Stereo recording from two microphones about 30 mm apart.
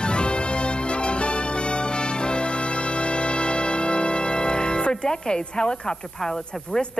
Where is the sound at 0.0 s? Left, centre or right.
Left.